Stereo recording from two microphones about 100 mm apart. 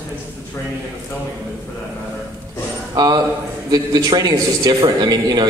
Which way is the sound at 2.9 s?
45° right (ahead or behind).